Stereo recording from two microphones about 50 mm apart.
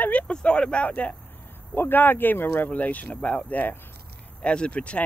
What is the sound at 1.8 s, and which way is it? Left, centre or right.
Speech, left.